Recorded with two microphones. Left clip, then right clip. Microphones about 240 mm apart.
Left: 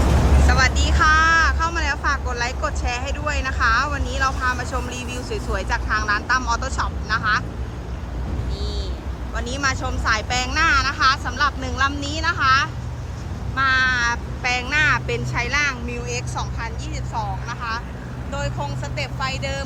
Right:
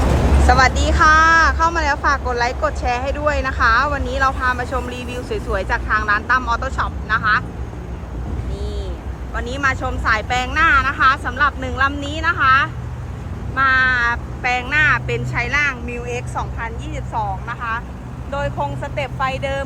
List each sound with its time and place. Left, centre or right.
0.4 s speech: centre
9.3 s speech: centre